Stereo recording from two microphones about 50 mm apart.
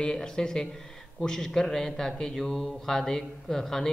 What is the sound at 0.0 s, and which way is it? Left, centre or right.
A man's voice, centre.